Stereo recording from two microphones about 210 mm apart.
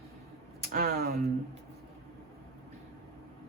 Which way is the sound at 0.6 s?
45° right (ahead or behind).